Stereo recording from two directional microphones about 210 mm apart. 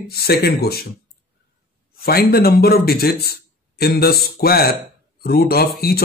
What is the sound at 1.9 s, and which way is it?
A man's voice, 45° left (ahead or behind).